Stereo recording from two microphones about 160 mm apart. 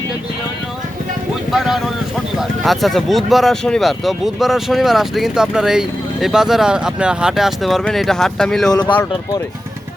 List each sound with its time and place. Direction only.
1.5 s speech: centre (ahead or behind)
8.7 s speech: 25° left (ahead or behind)